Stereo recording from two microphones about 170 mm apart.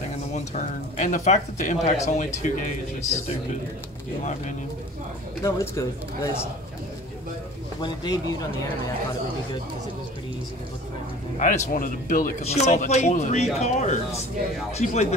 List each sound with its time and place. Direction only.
0.9 s speech: 50° left (ahead or behind)
5.4 s speech: 20° left (ahead or behind)
7.8 s speech: 25° left (ahead or behind)
11.3 s speech: 45° left (ahead or behind)